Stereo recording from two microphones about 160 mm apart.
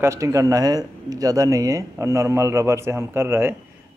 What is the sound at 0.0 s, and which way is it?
Speech, 20° right (ahead or behind).